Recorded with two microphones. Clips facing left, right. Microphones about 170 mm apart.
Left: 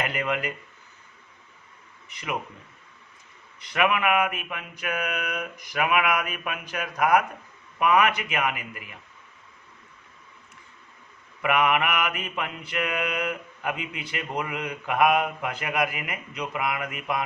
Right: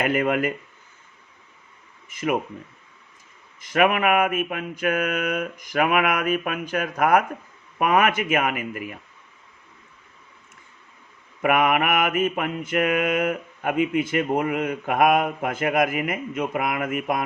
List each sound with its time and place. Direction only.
0.0 s mantra: 50° right (ahead or behind)
2.0 s mantra: 50° right (ahead or behind)
3.7 s mantra: 45° right (ahead or behind)
11.4 s mantra: 45° right (ahead or behind)